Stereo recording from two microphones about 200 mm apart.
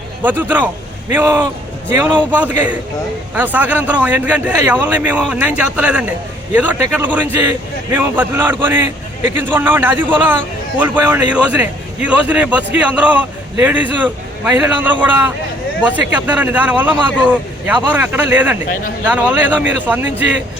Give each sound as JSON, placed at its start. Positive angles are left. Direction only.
{"t": 0.2, "sound": "a man's voice", "side_deg": -10}